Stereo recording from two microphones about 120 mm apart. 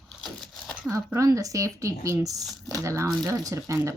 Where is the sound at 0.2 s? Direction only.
5° left (ahead or behind).